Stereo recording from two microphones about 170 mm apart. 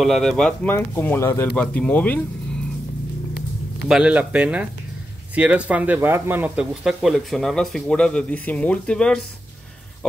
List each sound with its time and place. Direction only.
0.0 s speech: centre (ahead or behind)
3.9 s speech: 5° right (ahead or behind)